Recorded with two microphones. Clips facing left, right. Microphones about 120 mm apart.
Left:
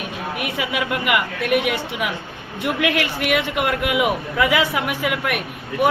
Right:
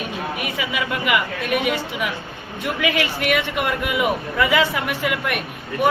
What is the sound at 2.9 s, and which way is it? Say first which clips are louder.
A man's voice: even; 10° left (ahead or behind).